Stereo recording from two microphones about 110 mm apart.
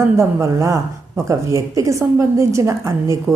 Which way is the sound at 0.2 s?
25° right (ahead or behind).